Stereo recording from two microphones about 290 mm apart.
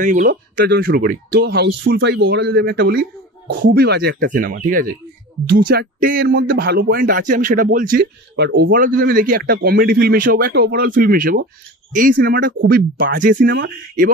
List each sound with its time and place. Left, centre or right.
0.0 s speech: right